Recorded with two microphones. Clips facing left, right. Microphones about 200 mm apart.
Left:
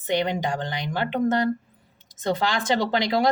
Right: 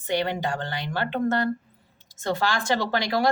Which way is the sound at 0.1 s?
20° left (ahead or behind).